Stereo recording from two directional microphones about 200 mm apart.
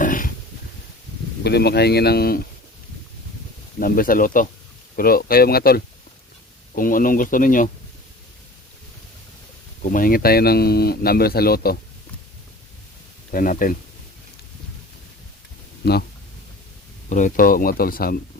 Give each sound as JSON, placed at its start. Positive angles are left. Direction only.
{"t": 0.0, "sound": "dog", "side_deg": 40}
{"t": 1.5, "sound": "speech", "side_deg": 55}
{"t": 3.8, "sound": "speech", "side_deg": 45}
{"t": 9.8, "sound": "speech", "side_deg": 45}
{"t": 13.3, "sound": "speech", "side_deg": 45}
{"t": 15.8, "sound": "speech", "side_deg": 55}
{"t": 17.1, "sound": "speech", "side_deg": 40}